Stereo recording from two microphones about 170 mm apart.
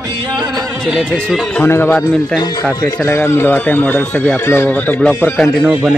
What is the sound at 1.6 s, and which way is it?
Speech, 15° left (ahead or behind).